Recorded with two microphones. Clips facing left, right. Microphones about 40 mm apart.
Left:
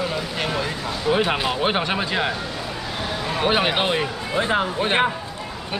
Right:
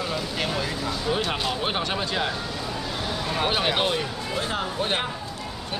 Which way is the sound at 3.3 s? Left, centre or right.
Centre.